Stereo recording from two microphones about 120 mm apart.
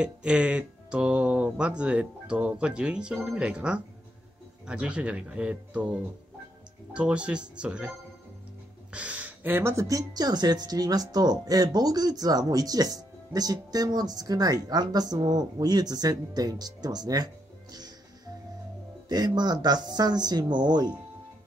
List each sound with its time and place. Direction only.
0.0 s speech: 10° right (ahead or behind)
8.9 s speech: 10° right (ahead or behind); by 20.9 s 35° right (ahead or behind)